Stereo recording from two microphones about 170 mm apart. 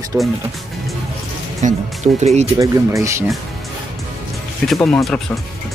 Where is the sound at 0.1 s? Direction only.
15° right (ahead or behind).